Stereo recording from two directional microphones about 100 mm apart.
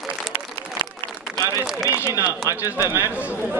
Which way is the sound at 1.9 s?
30° left (ahead or behind).